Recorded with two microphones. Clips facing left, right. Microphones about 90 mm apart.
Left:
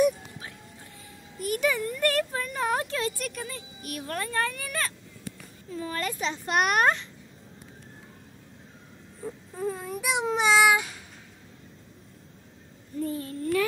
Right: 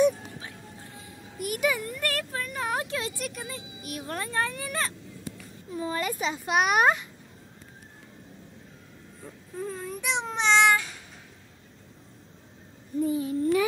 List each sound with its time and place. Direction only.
1.4 s speech: 10° right (ahead or behind)
5.9 s speech: 5° right (ahead or behind)
9.2 s baby cry: 5° left (ahead or behind)
13.0 s a sound: 15° right (ahead or behind)